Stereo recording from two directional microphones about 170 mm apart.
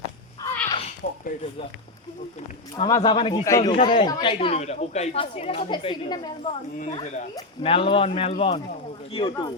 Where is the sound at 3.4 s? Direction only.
15° left (ahead or behind).